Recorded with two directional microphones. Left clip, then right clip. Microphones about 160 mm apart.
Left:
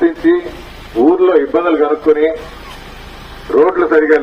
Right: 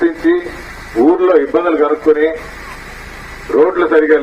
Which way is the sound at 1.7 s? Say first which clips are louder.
Even; 15° left (ahead or behind).